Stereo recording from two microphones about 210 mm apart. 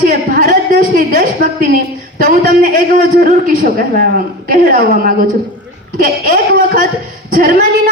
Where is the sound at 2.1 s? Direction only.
40° right (ahead or behind).